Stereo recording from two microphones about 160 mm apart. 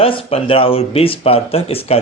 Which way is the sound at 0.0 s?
35° left (ahead or behind).